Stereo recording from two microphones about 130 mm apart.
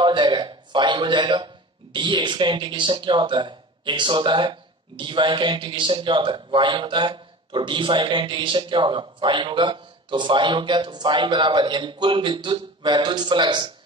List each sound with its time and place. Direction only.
0.0 s speech: 35° right (ahead or behind)